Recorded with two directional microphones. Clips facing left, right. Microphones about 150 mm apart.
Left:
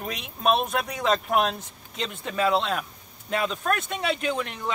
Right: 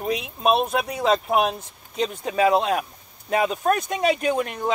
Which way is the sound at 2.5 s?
50° right (ahead or behind).